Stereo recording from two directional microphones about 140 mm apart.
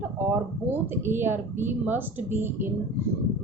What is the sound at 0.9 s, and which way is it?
A woman's voice, 15° right (ahead or behind).